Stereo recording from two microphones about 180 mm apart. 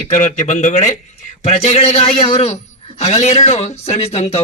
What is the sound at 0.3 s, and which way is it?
Speech, 40° left (ahead or behind).